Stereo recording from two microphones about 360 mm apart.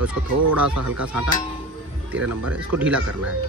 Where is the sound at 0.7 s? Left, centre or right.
Right.